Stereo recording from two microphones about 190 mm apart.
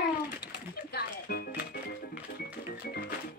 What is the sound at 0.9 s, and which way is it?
Music, 55° left (ahead or behind).